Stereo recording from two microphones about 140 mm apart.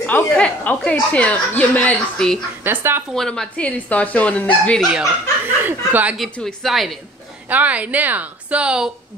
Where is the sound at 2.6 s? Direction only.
15° right (ahead or behind).